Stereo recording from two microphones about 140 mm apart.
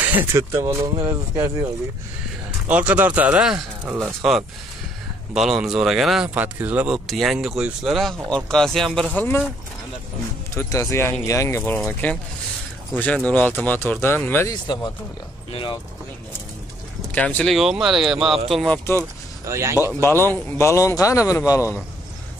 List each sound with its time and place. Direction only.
0.0 s speech: 15° right (ahead or behind)
2.7 s speech: 10° right (ahead or behind); by 9.4 s 10° left (ahead or behind)
10.5 s a man's voice: 20° left (ahead or behind)
14.5 s a man's voice: 30° left (ahead or behind)
17.1 s speech: 10° left (ahead or behind)
17.5 s speech: centre (ahead or behind)
19.4 s speech: 20° right (ahead or behind)
20.0 s a man's voice: 15° left (ahead or behind)